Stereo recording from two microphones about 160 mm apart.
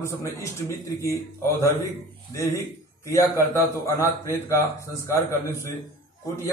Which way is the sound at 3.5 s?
15° left (ahead or behind).